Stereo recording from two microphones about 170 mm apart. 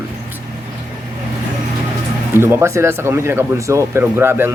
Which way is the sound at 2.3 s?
15° right (ahead or behind).